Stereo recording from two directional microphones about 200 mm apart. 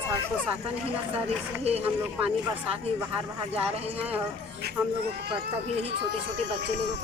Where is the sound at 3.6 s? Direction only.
5° right (ahead or behind).